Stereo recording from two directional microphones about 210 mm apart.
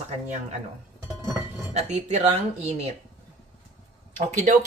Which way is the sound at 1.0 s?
15° right (ahead or behind).